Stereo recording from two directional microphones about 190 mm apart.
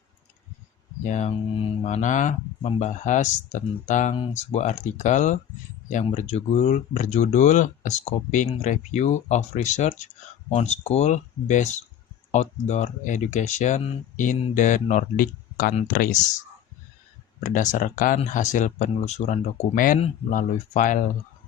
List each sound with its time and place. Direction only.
1.0 s speech: 40° left (ahead or behind)
17.4 s speech: 40° left (ahead or behind)